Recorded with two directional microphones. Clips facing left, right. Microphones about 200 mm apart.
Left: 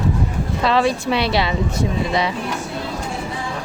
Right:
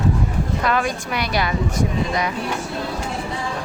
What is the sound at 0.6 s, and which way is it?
Speech, 30° left (ahead or behind).